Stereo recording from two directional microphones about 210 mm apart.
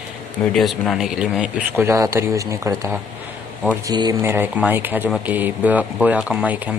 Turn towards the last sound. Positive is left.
turn(degrees=-5)  # may be behind; listen again after turning